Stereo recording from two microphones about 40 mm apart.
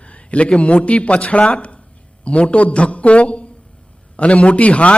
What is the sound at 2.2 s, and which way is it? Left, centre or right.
A man's voice, left.